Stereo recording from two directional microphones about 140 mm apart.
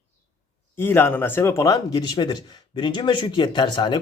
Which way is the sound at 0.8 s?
15° left (ahead or behind).